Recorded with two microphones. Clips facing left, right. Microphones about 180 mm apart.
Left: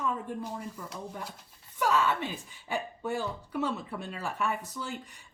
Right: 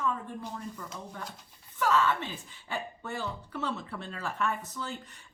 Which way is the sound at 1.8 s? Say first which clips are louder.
Even; 15° left (ahead or behind).